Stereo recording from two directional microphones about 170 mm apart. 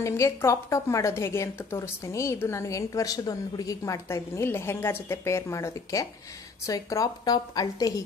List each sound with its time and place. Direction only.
0.0 s a woman's voice: 15° left (ahead or behind)